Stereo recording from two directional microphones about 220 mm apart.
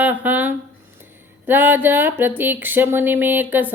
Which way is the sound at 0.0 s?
5° right (ahead or behind).